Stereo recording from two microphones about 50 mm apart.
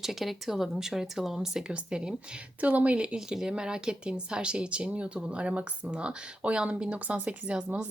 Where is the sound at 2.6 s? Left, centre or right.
Right.